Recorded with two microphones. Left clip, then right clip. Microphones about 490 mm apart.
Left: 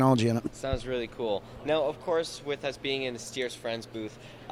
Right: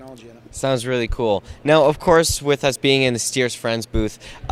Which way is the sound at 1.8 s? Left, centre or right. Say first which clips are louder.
Right 15 dB; right.